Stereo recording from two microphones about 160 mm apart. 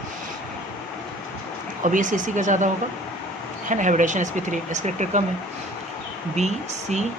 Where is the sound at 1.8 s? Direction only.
55° right (ahead or behind).